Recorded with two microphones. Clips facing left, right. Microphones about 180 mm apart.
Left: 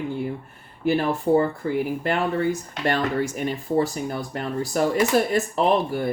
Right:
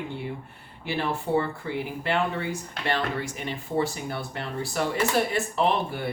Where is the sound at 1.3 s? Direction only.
40° left (ahead or behind).